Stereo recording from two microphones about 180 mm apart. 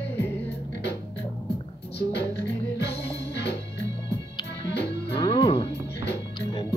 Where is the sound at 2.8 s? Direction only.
70° left (ahead or behind).